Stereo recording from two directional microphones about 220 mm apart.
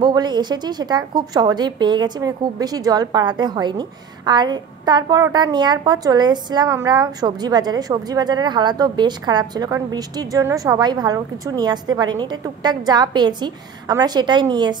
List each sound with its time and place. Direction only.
0.0 s a woman's voice: 20° right (ahead or behind)